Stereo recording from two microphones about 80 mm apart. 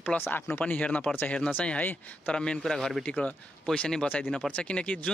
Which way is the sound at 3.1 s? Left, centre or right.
Centre.